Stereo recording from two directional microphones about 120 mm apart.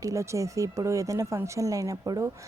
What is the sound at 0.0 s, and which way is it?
A woman's voice, 25° right (ahead or behind).